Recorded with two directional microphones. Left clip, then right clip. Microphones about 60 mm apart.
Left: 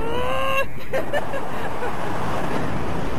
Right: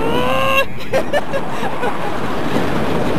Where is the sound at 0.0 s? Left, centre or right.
Centre.